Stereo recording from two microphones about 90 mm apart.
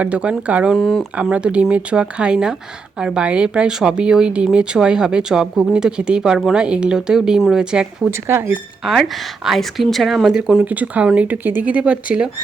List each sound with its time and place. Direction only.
0.0 s a woman's voice: 15° right (ahead or behind)
0.8 s speech: 5° left (ahead or behind)
1.1 s a woman's voice: 15° right (ahead or behind)
8.1 s speech: 25° right (ahead or behind)
8.8 s a woman's voice: centre (ahead or behind)